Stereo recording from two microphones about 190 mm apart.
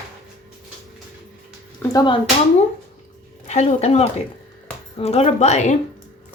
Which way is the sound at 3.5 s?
35° left (ahead or behind).